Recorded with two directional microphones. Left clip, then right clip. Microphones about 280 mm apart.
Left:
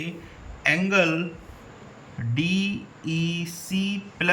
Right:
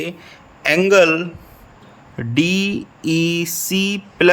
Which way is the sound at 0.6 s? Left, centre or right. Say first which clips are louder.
Right 9 dB; right.